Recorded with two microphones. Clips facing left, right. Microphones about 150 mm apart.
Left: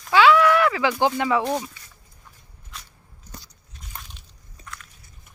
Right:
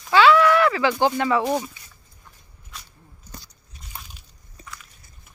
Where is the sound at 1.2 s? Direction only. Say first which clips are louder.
Right 1 dB; 10° left (ahead or behind).